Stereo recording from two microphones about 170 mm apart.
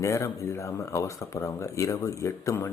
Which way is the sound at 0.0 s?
15° left (ahead or behind).